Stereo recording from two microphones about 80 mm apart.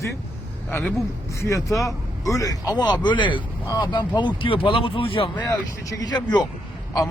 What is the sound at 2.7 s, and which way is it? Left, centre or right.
Speech, left.